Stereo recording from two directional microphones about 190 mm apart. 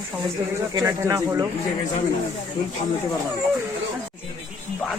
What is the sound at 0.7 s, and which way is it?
Speech, 20° right (ahead or behind).